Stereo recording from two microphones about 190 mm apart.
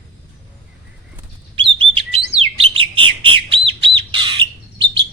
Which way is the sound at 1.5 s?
25° right (ahead or behind).